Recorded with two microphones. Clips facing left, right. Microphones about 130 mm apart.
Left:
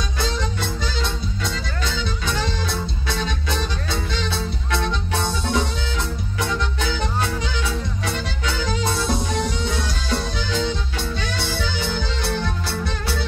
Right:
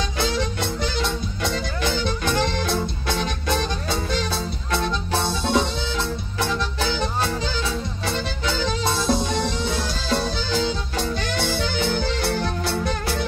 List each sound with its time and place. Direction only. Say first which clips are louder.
1.4 s music: right 5 dB; 50° right (ahead or behind)
4.7 s music: right 1 dB; 30° right (ahead or behind)
10.7 s music: right 2 dB; 45° right (ahead or behind)